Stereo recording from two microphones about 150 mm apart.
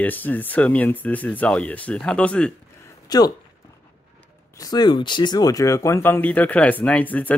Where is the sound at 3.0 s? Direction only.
25° left (ahead or behind).